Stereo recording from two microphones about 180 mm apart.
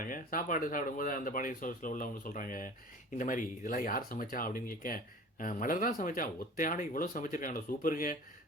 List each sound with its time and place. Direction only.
0.0 s speech: 50° left (ahead or behind)